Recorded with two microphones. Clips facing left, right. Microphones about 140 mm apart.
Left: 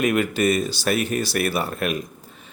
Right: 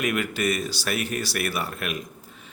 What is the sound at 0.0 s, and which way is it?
Speech, 25° left (ahead or behind).